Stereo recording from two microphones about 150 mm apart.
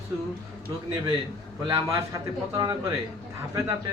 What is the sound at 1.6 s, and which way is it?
A man's voice, 30° right (ahead or behind).